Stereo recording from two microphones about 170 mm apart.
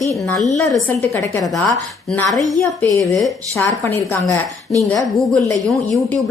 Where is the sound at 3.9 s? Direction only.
15° left (ahead or behind).